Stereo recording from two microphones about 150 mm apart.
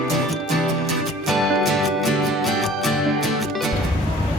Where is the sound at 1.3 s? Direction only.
Centre (ahead or behind).